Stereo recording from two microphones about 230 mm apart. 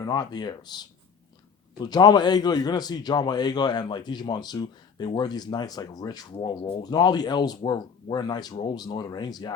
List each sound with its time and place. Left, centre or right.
0.0 s a man's voice: centre